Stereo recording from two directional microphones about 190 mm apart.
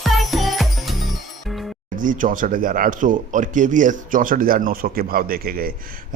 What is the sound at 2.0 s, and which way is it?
Speech, 45° right (ahead or behind).